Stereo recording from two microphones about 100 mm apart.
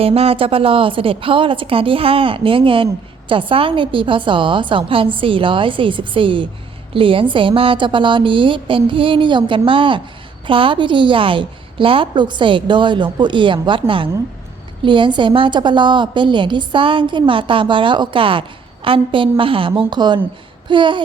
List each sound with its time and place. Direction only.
0.0 s a woman's voice: 75° right (ahead or behind); by 20.1 s 45° right (ahead or behind)
20.7 s babbling: 55° right (ahead or behind)